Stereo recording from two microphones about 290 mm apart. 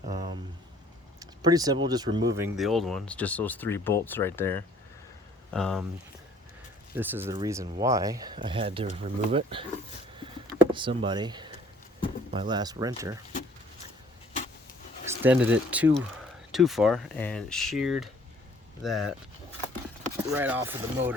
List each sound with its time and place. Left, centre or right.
0.1 s a sound: centre
1.2 s speech: centre
6.9 s speech: centre
10.7 s speech: centre
15.0 s speech: centre
20.3 s speech: centre